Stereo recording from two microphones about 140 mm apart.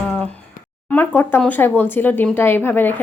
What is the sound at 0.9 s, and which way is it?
A woman's voice, 15° left (ahead or behind).